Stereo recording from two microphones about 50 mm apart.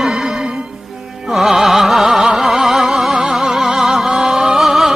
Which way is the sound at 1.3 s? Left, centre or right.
Centre.